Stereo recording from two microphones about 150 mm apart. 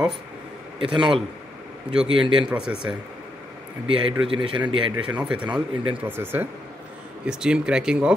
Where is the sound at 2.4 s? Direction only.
5° right (ahead or behind).